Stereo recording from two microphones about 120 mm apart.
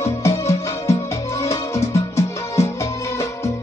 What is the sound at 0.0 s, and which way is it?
Music, 25° left (ahead or behind).